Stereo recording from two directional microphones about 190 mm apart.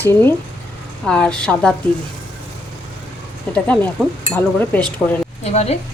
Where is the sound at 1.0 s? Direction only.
5° left (ahead or behind).